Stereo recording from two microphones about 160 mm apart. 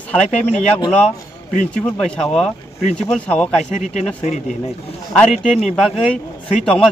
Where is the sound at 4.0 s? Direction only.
45° left (ahead or behind).